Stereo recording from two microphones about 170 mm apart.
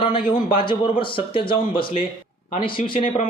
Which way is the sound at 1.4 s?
30° left (ahead or behind).